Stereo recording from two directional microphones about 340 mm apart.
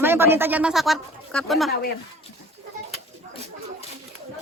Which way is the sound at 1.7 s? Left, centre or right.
Left.